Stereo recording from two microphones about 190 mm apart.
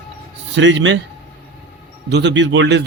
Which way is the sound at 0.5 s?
75° right (ahead or behind).